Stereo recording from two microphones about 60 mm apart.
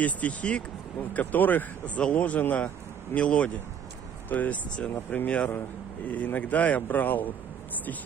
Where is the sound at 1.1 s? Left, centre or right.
Left.